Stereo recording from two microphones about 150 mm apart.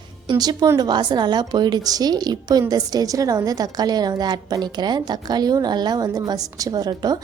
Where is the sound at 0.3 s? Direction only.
25° right (ahead or behind).